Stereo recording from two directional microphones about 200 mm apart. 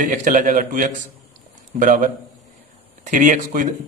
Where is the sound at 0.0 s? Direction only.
40° right (ahead or behind).